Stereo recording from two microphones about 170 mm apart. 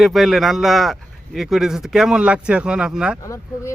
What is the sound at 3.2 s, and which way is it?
Speech, 15° left (ahead or behind).